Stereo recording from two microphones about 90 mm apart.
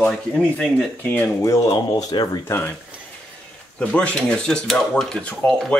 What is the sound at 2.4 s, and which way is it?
Speech, 25° left (ahead or behind).